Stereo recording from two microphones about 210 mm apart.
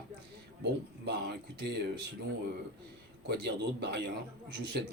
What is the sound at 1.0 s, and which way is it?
Speech, 50° right (ahead or behind).